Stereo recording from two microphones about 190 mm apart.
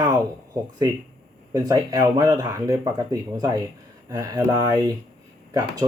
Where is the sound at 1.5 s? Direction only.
20° right (ahead or behind).